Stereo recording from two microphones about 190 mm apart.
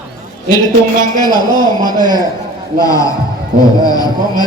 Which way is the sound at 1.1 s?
20° left (ahead or behind).